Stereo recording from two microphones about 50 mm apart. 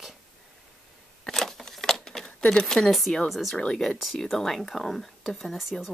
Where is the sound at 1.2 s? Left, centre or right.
Centre.